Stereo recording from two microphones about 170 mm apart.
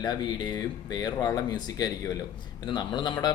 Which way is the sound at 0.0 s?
25° left (ahead or behind).